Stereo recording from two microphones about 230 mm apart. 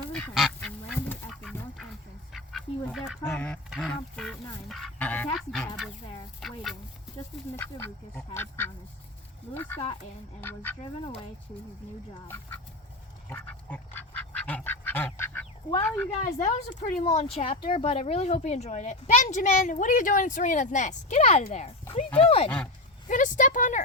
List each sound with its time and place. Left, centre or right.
0.1 s duck: centre
2.3 s goose: centre
6.4 s duck: centre
7.5 s speech: centre
9.6 s a sound: centre
10.4 s duck: centre
13.3 s duck: centre
15.8 s a sound: centre
16.1 s a woman's voice: left
22.4 s duck: centre
23.0 s speech: left